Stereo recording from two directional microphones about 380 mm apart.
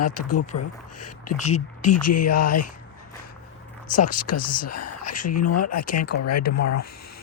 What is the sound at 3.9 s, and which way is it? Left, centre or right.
Speech, left.